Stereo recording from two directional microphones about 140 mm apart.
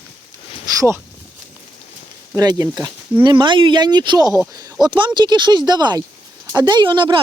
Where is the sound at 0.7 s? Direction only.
20° right (ahead or behind).